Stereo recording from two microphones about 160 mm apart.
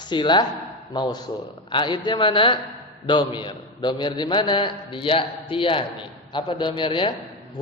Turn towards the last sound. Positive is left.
turn(degrees=30)  # may be behind; listen again after turning